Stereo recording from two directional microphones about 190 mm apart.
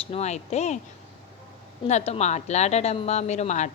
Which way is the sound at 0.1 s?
35° left (ahead or behind).